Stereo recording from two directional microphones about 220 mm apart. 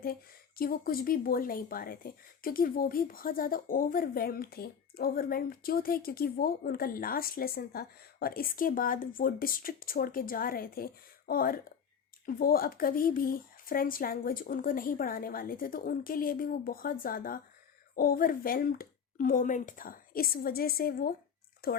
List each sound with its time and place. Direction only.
0.0 s speech: 40° left (ahead or behind)